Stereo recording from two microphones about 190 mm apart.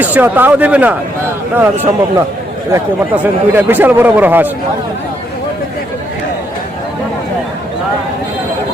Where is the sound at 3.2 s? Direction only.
10° right (ahead or behind).